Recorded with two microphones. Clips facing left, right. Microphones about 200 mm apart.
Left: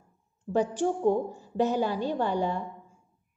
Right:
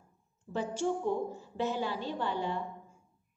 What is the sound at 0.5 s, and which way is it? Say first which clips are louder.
A woman's voice: left 6 dB; 45° left (ahead or behind).